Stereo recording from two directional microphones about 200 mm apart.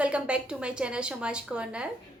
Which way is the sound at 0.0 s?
5° right (ahead or behind).